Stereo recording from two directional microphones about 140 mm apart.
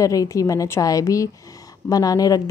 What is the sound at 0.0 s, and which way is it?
Speech, 25° left (ahead or behind).